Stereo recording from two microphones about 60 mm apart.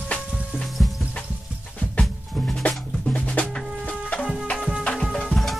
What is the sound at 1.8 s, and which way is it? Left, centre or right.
Music, centre.